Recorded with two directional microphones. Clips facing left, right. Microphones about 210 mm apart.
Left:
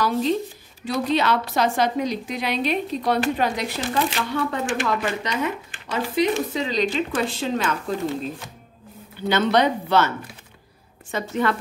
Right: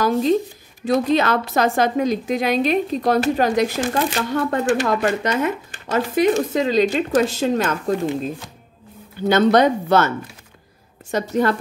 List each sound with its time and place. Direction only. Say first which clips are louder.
0.0 s a woman's voice: right 4 dB; 45° right (ahead or behind)
9.3 s a woman's voice: right 5 dB; 45° right (ahead or behind)